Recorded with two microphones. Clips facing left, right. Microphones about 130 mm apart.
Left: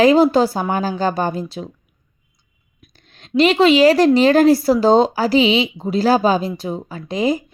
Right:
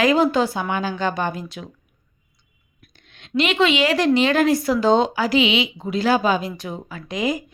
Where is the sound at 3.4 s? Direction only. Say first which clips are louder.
Left 7 dB; 35° left (ahead or behind).